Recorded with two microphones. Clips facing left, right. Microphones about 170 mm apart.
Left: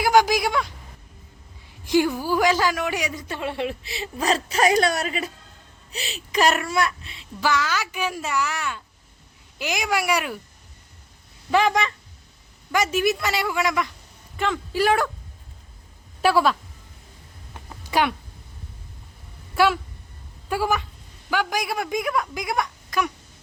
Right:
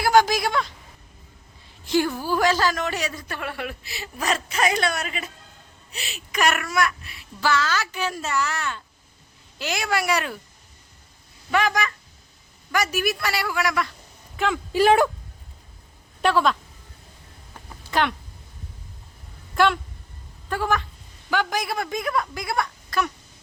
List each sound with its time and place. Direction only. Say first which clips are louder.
0.0 s speech: even; 15° left (ahead or behind)
1.8 s a woman's voice: left 2 dB; 15° left (ahead or behind)
11.5 s a woman's voice: left 3 dB; 25° left (ahead or behind)
14.3 s a woman's voice: right 1 dB; 5° right (ahead or behind)
14.7 s speech: right 4 dB; 20° right (ahead or behind)
16.2 s speech: left 1 dB; 5° left (ahead or behind)
17.9 s speech: left 1 dB; 10° left (ahead or behind)
19.5 s speech: even; 5° left (ahead or behind)